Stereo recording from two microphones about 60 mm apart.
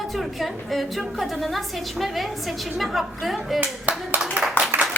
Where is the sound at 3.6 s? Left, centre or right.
Right.